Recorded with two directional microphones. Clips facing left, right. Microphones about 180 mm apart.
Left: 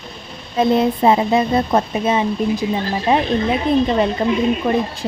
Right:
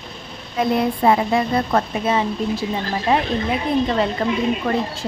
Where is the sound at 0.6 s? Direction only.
25° left (ahead or behind).